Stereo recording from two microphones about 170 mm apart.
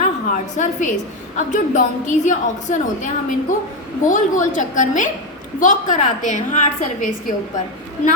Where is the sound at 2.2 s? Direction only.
45° left (ahead or behind).